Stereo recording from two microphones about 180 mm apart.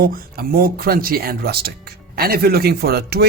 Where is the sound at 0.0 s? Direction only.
55° right (ahead or behind).